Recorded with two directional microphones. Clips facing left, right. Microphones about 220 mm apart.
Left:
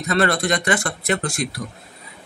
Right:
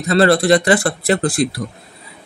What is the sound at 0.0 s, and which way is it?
Speech, 35° right (ahead or behind).